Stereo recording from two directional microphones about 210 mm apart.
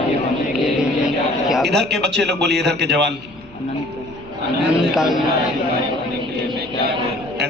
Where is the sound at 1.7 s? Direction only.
55° right (ahead or behind).